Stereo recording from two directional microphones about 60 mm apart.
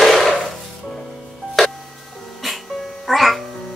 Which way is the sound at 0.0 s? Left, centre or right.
Centre.